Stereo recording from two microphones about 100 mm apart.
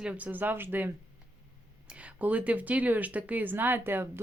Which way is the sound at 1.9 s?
15° right (ahead or behind).